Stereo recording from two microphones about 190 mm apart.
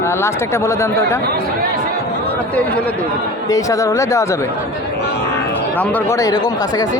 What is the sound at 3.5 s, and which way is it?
Speech, 15° left (ahead or behind).